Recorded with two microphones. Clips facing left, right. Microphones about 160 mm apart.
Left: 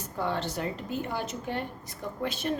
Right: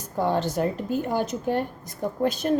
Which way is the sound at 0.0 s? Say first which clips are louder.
Right 7 dB; 40° right (ahead or behind).